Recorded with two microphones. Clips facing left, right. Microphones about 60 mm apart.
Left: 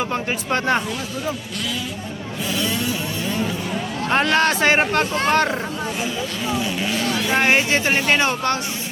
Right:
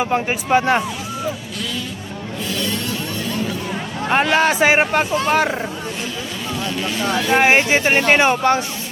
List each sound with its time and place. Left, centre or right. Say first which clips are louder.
0.5 s speech: right 5 dB; centre
2.5 s music: left 1 dB; centre
4.1 s speech: right 2 dB; centre
6.5 s vehicle: even; centre
7.1 s speech: right 5 dB; centre
7.5 s speech: right 3 dB; centre